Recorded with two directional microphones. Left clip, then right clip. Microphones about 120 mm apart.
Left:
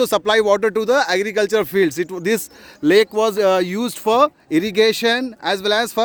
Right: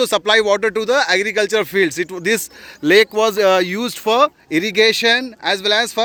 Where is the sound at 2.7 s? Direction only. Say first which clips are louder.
Right 2 dB; 40° left (ahead or behind).